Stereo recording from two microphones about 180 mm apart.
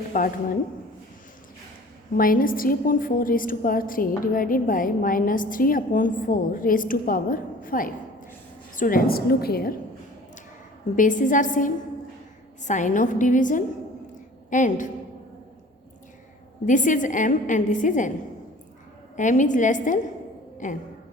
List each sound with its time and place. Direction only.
0.1 s a woman's voice: 50° left (ahead or behind)
2.1 s a woman's voice: 50° left (ahead or behind)
10.9 s a woman's voice: 45° left (ahead or behind)
16.6 s a woman's voice: 45° left (ahead or behind)
19.1 s a woman's voice: 45° left (ahead or behind)